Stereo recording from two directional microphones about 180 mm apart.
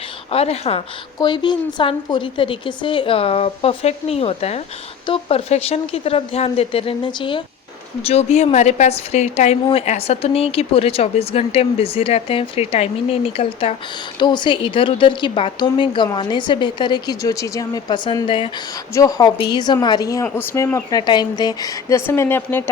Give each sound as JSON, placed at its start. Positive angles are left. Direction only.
{"t": 0.3, "sound": "a woman's voice", "side_deg": 35}